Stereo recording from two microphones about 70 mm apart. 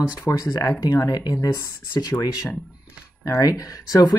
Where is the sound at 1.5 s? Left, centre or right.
Left.